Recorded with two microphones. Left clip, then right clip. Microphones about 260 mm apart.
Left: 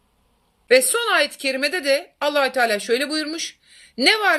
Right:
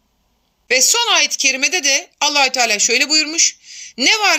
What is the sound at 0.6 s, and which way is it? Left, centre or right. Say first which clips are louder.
A woman's voice: right 2 dB; right.